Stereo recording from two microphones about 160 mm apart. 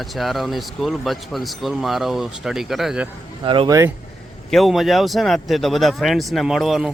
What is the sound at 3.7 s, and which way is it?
Speech, 20° right (ahead or behind).